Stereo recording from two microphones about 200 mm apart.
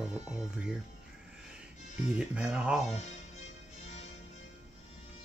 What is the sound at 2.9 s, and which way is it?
Music, 35° left (ahead or behind).